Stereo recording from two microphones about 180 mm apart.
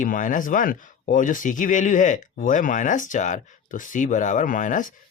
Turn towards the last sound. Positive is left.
turn(degrees=45)  # may be behind; listen again after turning